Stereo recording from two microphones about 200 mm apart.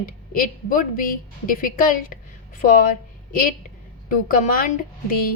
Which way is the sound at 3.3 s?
45° left (ahead or behind).